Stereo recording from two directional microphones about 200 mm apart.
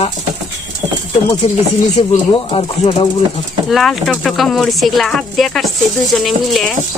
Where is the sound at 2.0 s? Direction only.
25° left (ahead or behind).